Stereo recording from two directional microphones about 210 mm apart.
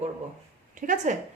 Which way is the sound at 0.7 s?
40° right (ahead or behind).